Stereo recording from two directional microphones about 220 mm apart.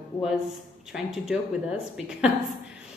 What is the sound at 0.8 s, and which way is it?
Speech, centre (ahead or behind).